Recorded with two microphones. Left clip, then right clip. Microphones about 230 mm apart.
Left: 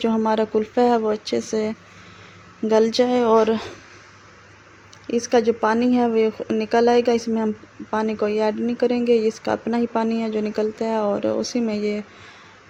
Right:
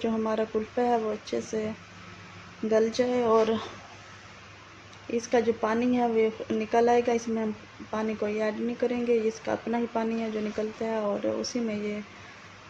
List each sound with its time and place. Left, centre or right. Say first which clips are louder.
0.0 s speech: left 8 dB; left
5.1 s speech: left 7 dB; left